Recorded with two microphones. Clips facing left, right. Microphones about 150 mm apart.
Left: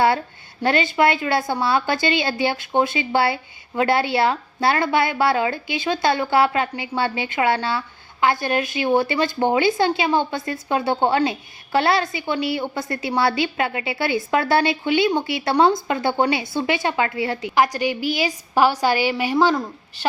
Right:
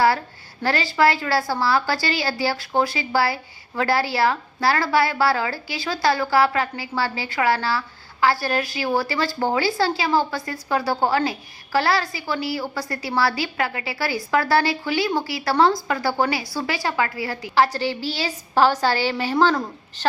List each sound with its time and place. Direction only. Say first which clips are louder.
0.6 s a woman's voice: left 1 dB; 20° left (ahead or behind)